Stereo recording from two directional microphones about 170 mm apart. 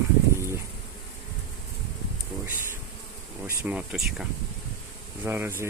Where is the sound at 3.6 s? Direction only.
5° right (ahead or behind).